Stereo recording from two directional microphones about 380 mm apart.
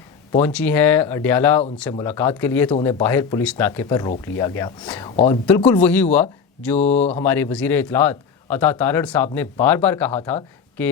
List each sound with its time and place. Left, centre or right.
0.3 s speech: centre
5.5 s speech: centre
6.7 s speech: centre
7.1 s speech: centre